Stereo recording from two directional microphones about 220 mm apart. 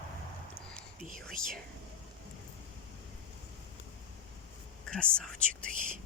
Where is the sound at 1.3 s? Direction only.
40° right (ahead or behind).